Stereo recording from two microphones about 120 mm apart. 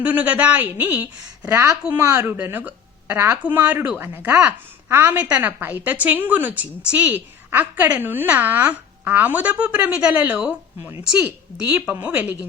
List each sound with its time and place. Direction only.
0.0 s a woman's voice: 15° right (ahead or behind)
1.4 s a woman's voice: 25° right (ahead or behind)
1.8 s a woman's voice: 15° right (ahead or behind)